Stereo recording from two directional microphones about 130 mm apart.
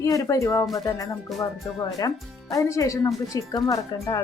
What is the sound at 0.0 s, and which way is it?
Speech, 25° left (ahead or behind).